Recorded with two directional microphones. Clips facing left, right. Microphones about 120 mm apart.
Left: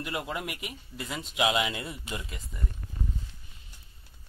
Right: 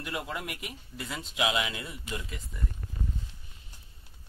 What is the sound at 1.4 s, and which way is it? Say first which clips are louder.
Speech: left 3 dB; 25° left (ahead or behind).